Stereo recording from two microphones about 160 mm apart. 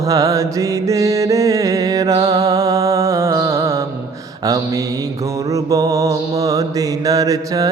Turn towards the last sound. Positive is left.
turn(degrees=-20)  # may be behind; listen again after turning